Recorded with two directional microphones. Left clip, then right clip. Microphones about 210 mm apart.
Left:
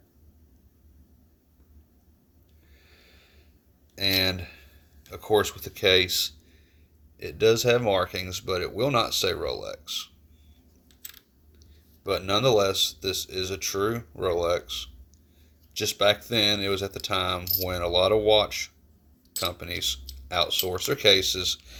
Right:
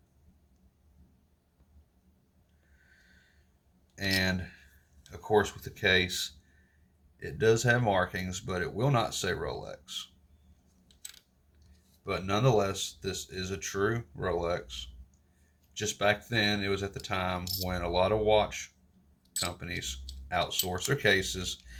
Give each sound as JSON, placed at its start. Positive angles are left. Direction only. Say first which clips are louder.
{"t": 3.9, "sound": "a sound", "louder": "left 6 dB", "side_deg": 15}
{"t": 5.2, "sound": "speech", "louder": "left 4 dB", "side_deg": 20}
{"t": 12.0, "sound": "speech", "louder": "left 6 dB", "side_deg": 25}
{"t": 16.0, "sound": "speech", "louder": "left 5 dB", "side_deg": 20}
{"t": 17.4, "sound": "speech", "louder": "left 5 dB", "side_deg": 0}
{"t": 17.7, "sound": "speech", "louder": "left 6 dB", "side_deg": 20}
{"t": 21.2, "sound": "speech", "louder": "left 10 dB", "side_deg": 10}